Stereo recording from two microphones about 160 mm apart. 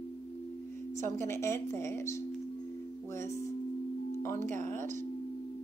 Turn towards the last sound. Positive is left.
turn(degrees=-50)  # may be behind; listen again after turning